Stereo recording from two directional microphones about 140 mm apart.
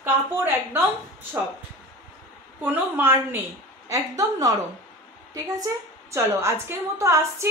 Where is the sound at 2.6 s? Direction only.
15° right (ahead or behind).